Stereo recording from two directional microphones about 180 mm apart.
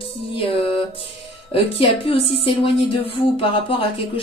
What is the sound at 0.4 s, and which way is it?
Music, 30° left (ahead or behind).